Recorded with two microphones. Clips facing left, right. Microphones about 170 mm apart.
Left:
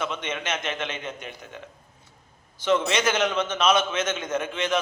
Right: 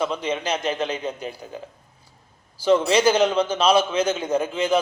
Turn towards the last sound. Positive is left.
turn(degrees=-30)  # may be behind; listen again after turning